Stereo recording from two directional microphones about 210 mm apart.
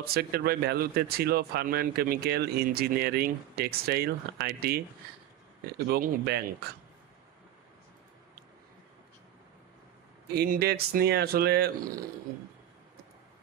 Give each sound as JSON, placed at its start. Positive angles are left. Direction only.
{"t": 0.0, "sound": "speech", "side_deg": -45}
{"t": 5.9, "sound": "speech", "side_deg": -50}
{"t": 10.3, "sound": "speech", "side_deg": -50}